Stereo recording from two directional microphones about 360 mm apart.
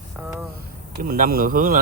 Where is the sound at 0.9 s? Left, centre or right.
Right.